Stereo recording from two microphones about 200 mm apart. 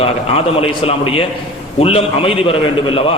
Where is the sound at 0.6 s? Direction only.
30° left (ahead or behind).